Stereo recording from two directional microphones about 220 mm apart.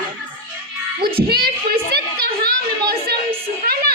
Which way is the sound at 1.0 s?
45° right (ahead or behind).